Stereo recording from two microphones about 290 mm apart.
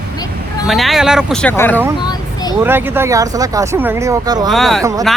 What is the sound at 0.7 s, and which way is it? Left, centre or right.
Speech, centre.